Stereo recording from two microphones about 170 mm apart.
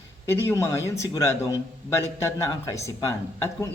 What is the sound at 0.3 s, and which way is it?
A man's voice, 15° left (ahead or behind).